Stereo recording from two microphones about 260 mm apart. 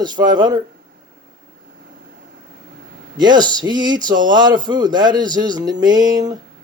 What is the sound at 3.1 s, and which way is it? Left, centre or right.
A man's voice, centre.